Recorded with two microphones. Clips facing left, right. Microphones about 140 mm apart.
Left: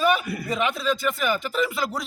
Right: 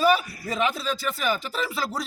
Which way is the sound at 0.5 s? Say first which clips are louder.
Left 1 dB; centre (ahead or behind).